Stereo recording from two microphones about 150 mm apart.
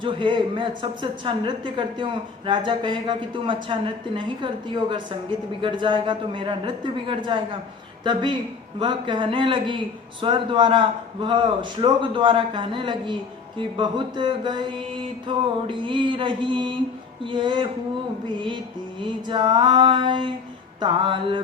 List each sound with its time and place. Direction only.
0.0 s a man's voice: 35° right (ahead or behind)